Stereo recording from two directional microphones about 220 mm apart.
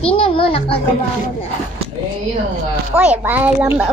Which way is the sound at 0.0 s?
25° left (ahead or behind).